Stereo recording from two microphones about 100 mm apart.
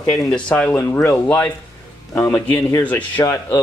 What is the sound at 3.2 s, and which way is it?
Speech, 30° left (ahead or behind).